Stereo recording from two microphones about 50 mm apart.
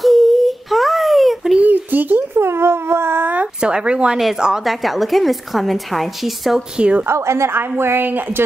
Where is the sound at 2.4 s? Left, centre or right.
Right.